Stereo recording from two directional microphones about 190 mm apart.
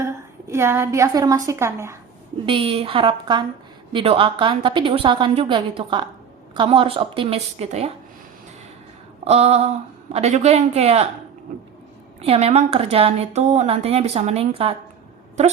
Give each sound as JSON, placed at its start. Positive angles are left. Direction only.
{"t": 0.0, "sound": "a woman's voice", "side_deg": -15}
{"t": 2.5, "sound": "a woman's voice", "side_deg": -30}
{"t": 9.2, "sound": "a woman's voice", "side_deg": -30}
{"t": 12.2, "sound": "a woman's voice", "side_deg": -35}